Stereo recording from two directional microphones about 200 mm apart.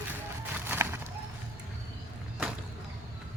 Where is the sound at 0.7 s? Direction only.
10° right (ahead or behind).